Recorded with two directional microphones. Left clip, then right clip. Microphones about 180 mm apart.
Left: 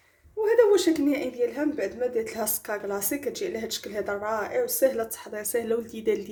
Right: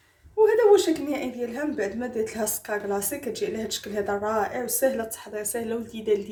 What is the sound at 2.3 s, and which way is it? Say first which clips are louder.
Speech: right 1 dB; 50° left (ahead or behind).